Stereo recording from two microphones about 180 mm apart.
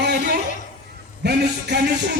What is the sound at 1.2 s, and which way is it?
Speech, 65° right (ahead or behind).